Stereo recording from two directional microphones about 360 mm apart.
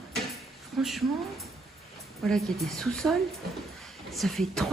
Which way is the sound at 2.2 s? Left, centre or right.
Centre.